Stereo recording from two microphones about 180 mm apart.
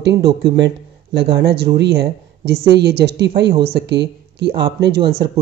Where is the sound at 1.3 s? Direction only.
65° right (ahead or behind).